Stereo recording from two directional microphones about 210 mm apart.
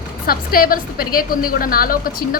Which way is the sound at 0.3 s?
45° left (ahead or behind).